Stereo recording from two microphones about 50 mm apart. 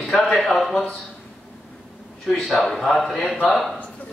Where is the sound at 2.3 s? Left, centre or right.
Centre.